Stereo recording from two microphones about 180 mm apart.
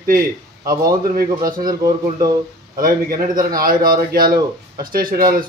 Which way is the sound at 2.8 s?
55° right (ahead or behind).